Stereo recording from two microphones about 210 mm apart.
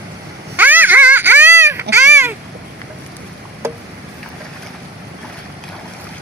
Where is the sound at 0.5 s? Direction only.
10° right (ahead or behind).